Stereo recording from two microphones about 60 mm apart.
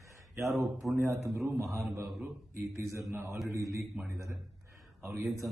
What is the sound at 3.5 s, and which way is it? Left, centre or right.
Speech, right.